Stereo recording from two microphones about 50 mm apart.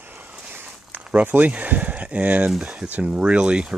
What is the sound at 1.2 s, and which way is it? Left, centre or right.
Speech, right.